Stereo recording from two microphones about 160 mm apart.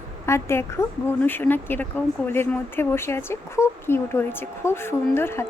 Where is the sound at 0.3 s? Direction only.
15° left (ahead or behind).